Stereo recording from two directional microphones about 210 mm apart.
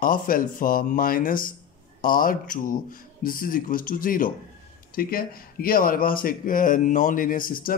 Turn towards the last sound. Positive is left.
turn(degrees=40)  # may be behind; listen again after turning